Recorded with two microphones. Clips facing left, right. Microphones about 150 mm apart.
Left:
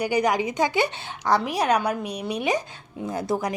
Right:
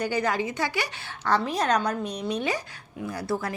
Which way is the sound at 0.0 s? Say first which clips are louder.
Left 4 dB; 15° left (ahead or behind).